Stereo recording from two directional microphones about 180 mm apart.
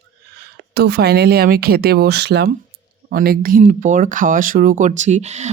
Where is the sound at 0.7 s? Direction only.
65° right (ahead or behind).